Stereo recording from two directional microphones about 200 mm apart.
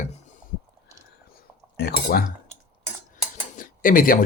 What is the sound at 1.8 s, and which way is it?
Speech, 50° left (ahead or behind).